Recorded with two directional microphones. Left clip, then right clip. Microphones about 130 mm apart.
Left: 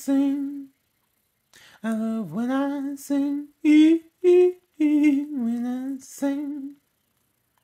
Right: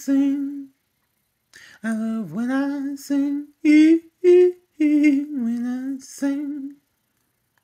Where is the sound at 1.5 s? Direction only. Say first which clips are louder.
Right 1 dB; 20° left (ahead or behind).